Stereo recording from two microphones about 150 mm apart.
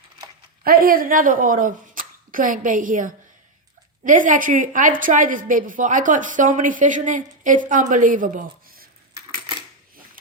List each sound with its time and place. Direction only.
0.6 s a woman's voice: 75° right (ahead or behind)